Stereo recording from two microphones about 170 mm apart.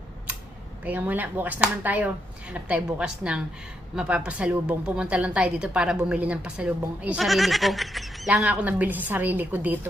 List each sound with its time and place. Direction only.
0.9 s a woman's voice: 10° right (ahead or behind)